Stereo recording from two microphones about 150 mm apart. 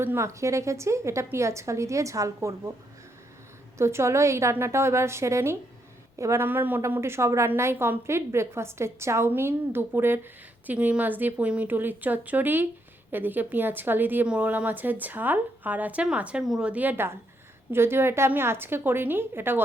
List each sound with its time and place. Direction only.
0.0 s a woman's voice: 15° right (ahead or behind)
3.8 s a woman's voice: 20° right (ahead or behind)